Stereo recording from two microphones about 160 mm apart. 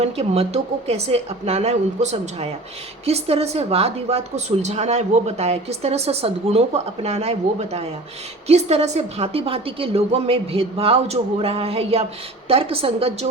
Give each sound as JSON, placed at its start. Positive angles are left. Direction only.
{"t": 0.0, "sound": "a woman's voice", "side_deg": -40}